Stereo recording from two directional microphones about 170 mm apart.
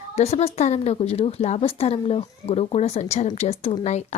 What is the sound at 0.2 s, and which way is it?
A woman's voice, 40° left (ahead or behind).